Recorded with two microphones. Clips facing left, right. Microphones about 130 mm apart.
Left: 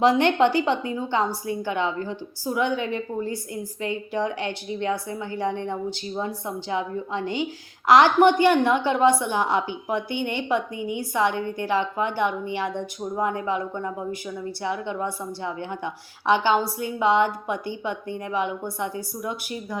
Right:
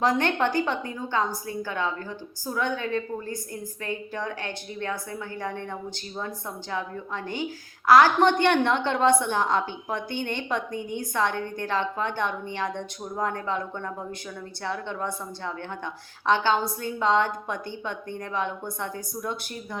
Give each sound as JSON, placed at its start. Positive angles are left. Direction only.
{"t": 0.0, "sound": "a woman's voice", "side_deg": 15}